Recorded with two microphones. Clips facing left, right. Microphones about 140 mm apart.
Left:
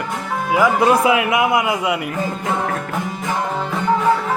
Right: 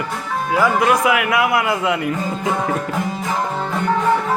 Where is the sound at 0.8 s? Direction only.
30° left (ahead or behind).